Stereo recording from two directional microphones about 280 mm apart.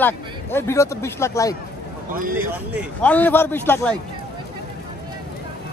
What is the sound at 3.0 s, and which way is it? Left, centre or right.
Speech, centre.